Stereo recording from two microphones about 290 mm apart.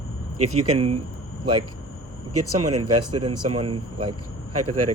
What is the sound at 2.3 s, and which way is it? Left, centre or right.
Speech, right.